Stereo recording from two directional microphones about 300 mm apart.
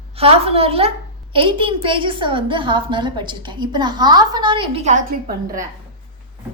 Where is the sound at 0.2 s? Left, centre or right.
Centre.